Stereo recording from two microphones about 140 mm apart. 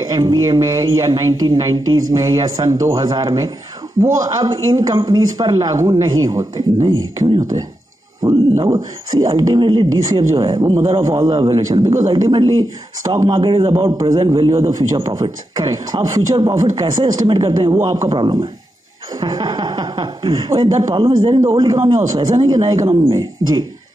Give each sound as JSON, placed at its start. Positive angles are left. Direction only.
{"t": 0.1, "sound": "speech", "side_deg": -30}
{"t": 13.9, "sound": "speech", "side_deg": -30}
{"t": 21.0, "sound": "speech", "side_deg": -35}
{"t": 21.4, "sound": "speech", "side_deg": -25}